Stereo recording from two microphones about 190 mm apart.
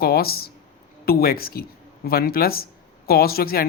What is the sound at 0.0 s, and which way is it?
Speech, 55° left (ahead or behind).